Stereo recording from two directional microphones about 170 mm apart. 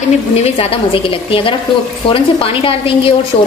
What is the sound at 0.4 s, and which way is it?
A woman's voice, 35° left (ahead or behind).